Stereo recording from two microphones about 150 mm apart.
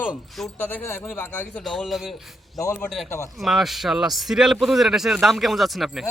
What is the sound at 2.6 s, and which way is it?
Speech, 20° left (ahead or behind).